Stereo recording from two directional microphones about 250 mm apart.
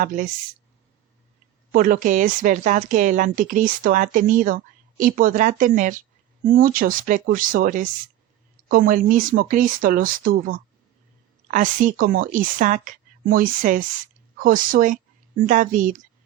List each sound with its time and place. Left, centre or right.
1.7 s speech: right